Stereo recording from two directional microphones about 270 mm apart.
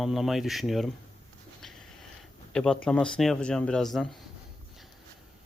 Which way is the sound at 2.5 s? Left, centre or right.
Centre.